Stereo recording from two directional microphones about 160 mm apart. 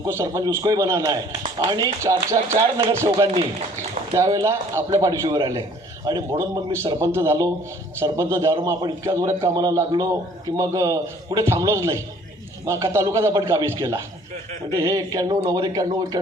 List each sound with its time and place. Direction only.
0.0 s a man's voice: 15° right (ahead or behind)